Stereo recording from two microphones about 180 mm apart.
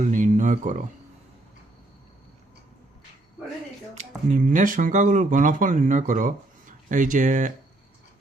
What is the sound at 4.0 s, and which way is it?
A man's voice, 40° right (ahead or behind).